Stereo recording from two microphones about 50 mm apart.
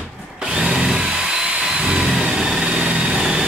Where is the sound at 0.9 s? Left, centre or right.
Centre.